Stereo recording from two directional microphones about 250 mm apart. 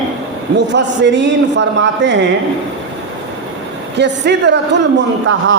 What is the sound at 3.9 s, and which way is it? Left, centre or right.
Speech, right.